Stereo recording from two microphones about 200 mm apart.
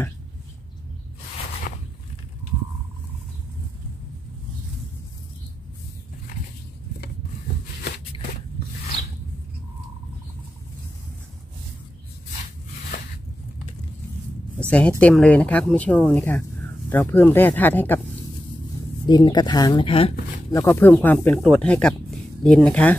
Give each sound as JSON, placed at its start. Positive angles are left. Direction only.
{"t": 14.7, "sound": "speech", "side_deg": 5}
{"t": 19.0, "sound": "speech", "side_deg": 20}
{"t": 20.5, "sound": "speech", "side_deg": 10}